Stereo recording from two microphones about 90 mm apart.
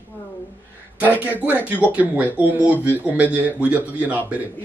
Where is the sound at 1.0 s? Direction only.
15° right (ahead or behind).